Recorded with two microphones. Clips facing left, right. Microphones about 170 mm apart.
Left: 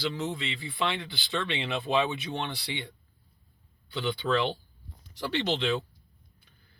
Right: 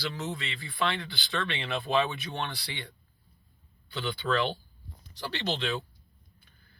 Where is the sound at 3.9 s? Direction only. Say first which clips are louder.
Left 2 dB; 20° left (ahead or behind).